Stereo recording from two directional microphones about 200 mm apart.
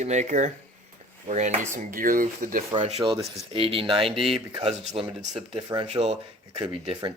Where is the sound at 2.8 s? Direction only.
30° right (ahead or behind).